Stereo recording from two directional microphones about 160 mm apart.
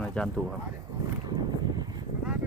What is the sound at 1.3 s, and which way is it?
Boat, 25° right (ahead or behind).